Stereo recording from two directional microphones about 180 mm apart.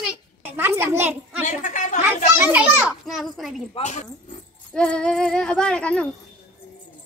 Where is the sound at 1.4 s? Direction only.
45° left (ahead or behind).